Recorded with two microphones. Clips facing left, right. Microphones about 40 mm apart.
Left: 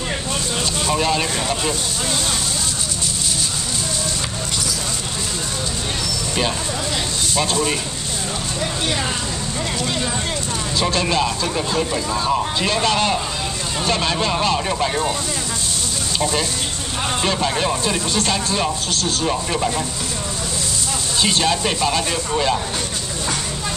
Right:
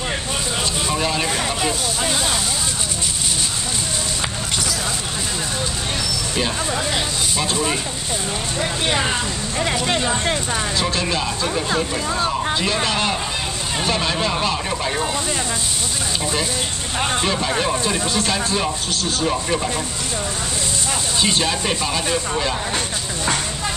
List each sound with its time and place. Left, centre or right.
0.8 s speech: centre
1.6 s speech: centre
7.3 s speech: centre
8.5 s speech: right
10.8 s speech: centre
16.2 s speech: centre
21.2 s speech: centre